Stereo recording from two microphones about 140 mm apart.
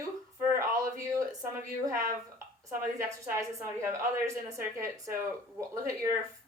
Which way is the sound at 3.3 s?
20° right (ahead or behind).